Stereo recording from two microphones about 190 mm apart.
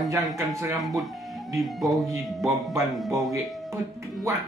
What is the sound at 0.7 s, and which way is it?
A man's voice, centre (ahead or behind).